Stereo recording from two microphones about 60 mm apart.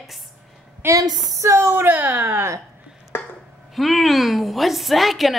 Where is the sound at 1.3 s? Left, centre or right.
Right.